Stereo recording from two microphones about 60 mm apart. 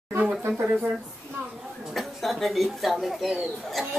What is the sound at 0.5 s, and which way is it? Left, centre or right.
Speech, right.